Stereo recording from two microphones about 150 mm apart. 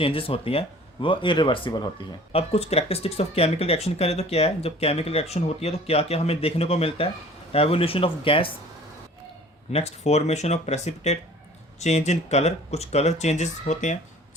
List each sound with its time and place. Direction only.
0.0 s speech: 40° left (ahead or behind)
2.3 s speech: 45° left (ahead or behind)
9.7 s speech: 45° left (ahead or behind)